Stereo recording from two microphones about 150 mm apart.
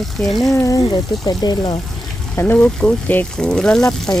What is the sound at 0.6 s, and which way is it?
Speech, 20° left (ahead or behind).